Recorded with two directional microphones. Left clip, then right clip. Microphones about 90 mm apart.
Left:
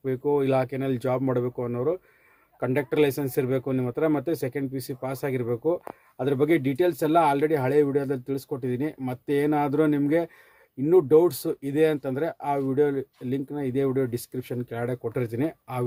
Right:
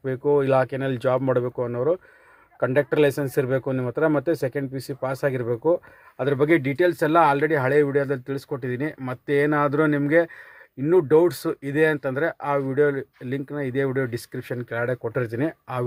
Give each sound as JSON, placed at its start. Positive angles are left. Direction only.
{"t": 0.0, "sound": "speech", "side_deg": 25}
{"t": 3.7, "sound": "speech", "side_deg": 15}